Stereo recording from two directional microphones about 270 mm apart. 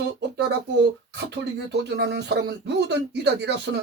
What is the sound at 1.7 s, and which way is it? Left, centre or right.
Speech, right.